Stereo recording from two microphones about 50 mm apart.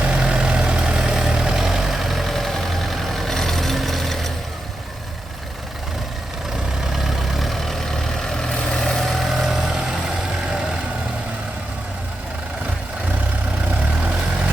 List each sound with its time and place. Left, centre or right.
0.0 s vehicle: right; by 4.3 s centre
6.9 s vehicle: centre